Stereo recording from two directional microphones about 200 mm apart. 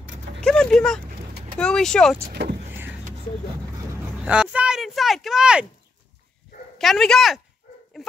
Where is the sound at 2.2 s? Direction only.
50° right (ahead or behind).